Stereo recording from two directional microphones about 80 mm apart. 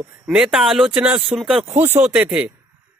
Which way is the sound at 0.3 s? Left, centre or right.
Centre.